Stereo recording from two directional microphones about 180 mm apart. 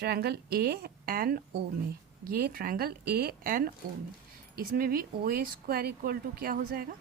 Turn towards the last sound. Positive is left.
turn(degrees=-55)  # may be behind; listen again after turning